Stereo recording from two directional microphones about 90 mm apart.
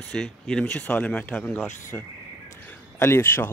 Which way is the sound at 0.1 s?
5° left (ahead or behind).